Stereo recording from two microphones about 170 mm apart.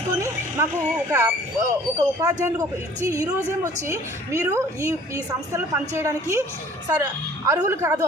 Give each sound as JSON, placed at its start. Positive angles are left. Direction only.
{"t": 0.2, "sound": "a woman's voice", "side_deg": -15}